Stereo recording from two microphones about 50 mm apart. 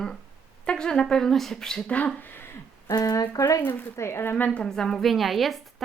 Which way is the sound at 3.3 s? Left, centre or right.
Left.